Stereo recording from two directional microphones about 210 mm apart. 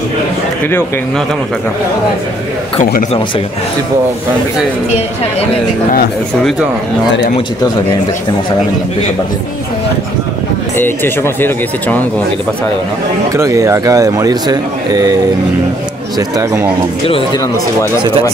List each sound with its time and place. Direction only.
0.7 s speech: 10° left (ahead or behind)
2.8 s speech: 40° left (ahead or behind)
10.8 s speech: 10° left (ahead or behind)
13.3 s speech: 15° right (ahead or behind)
16.2 s speech: 15° right (ahead or behind)